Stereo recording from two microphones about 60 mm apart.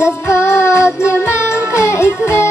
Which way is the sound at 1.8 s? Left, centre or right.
Left.